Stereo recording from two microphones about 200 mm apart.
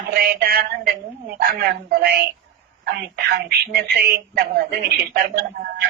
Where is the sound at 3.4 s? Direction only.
50° right (ahead or behind).